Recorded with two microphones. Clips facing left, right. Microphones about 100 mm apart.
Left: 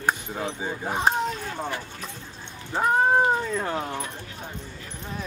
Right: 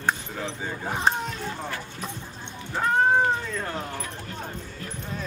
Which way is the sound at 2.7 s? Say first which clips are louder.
Left 1 dB; 15° left (ahead or behind).